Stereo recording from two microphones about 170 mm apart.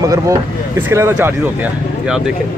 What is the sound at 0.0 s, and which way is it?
Speech, 20° right (ahead or behind).